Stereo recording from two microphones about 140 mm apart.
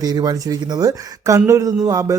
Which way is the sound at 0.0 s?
25° right (ahead or behind).